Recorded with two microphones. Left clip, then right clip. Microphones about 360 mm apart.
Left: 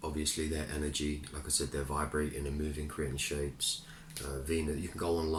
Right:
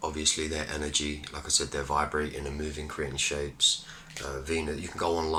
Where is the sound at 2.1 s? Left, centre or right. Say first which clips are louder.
Right 4 dB; right.